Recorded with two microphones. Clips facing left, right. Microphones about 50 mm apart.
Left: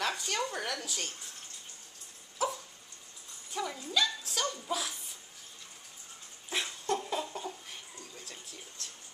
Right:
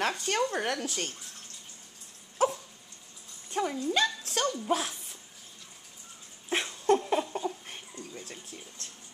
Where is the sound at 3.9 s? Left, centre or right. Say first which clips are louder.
Left 1 dB; right.